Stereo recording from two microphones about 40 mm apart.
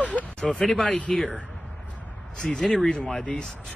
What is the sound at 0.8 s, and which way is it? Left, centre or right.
Speech, left.